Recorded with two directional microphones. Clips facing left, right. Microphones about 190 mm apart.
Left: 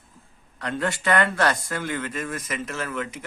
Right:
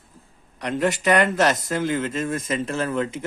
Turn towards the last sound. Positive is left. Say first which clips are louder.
# right 6 dB
turn(degrees=-30)  # may be behind; listen again after turning